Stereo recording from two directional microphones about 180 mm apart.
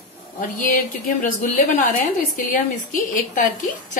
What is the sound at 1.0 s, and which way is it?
A woman's voice, 50° left (ahead or behind).